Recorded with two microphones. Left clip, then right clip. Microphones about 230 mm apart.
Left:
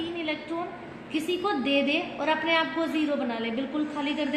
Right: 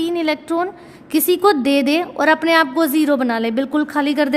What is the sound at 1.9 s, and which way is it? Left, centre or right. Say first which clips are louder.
A woman's voice: right 11 dB; right.